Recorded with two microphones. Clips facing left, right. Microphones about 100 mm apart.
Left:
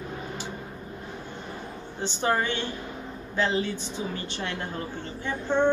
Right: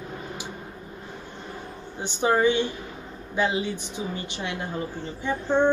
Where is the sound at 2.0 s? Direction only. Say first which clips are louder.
Right 3 dB; 15° right (ahead or behind).